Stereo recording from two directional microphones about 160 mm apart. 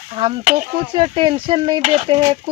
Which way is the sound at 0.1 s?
30° right (ahead or behind).